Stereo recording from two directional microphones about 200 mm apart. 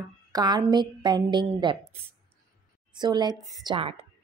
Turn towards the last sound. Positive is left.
turn(degrees=-25)  # may be behind; listen again after turning